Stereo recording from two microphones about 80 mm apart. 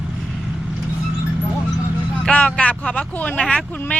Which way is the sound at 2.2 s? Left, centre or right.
Centre.